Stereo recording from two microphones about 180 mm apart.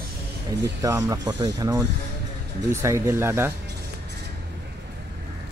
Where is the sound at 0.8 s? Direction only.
20° right (ahead or behind).